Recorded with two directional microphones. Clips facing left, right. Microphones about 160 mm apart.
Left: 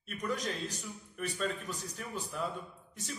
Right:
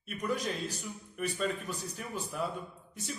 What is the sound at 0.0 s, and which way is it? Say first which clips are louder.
A man's voice: right 2 dB; 10° right (ahead or behind).